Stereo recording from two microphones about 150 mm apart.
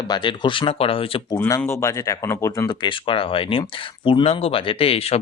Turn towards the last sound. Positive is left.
turn(degrees=40)  # may be behind; listen again after turning